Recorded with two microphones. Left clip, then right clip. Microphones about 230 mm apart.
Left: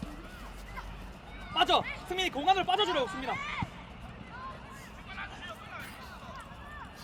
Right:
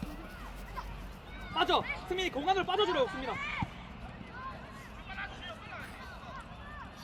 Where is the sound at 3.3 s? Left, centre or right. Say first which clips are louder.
Left 1 dB; left.